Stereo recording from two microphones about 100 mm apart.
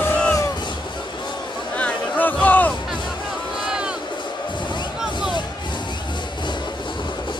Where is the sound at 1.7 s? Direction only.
15° left (ahead or behind).